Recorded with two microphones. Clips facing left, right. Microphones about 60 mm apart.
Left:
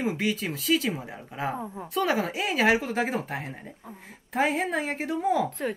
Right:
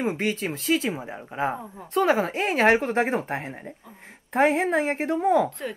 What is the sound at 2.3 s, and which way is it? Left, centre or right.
A woman's voice, right.